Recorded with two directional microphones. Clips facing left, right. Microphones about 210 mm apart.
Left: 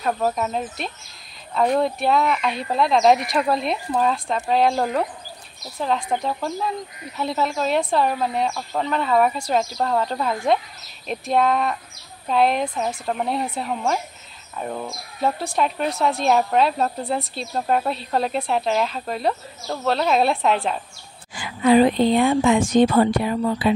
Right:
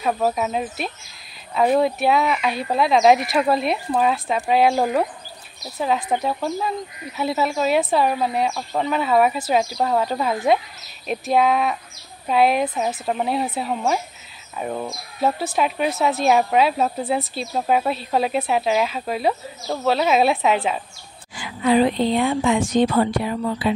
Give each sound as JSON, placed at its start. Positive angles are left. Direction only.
{"t": 0.0, "sound": "speech", "side_deg": -5}
{"t": 21.4, "sound": "a woman's voice", "side_deg": 50}